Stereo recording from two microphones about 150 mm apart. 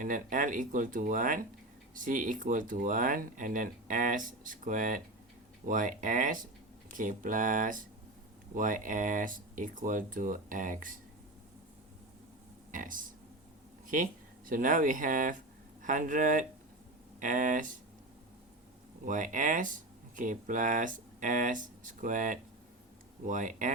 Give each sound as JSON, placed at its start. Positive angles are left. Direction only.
{"t": 0.0, "sound": "speech", "side_deg": -60}
{"t": 12.7, "sound": "speech", "side_deg": -65}
{"t": 19.0, "sound": "speech", "side_deg": -60}